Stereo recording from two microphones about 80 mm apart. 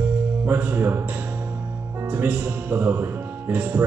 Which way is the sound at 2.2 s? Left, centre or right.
Right.